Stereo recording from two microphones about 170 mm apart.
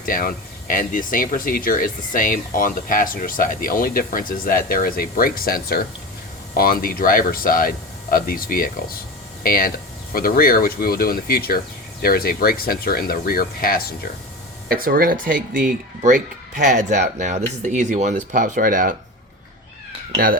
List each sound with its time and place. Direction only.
0.0 s speech: 55° left (ahead or behind)
14.7 s speech: 60° right (ahead or behind)